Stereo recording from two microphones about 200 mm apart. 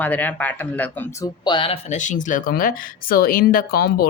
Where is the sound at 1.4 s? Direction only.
25° left (ahead or behind); by 4.1 s 50° left (ahead or behind).